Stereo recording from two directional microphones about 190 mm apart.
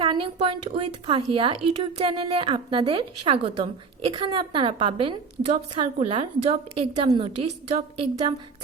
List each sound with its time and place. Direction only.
0.0 s a woman's voice: 25° right (ahead or behind)